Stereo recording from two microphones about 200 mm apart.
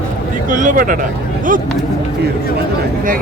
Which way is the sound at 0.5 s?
40° right (ahead or behind).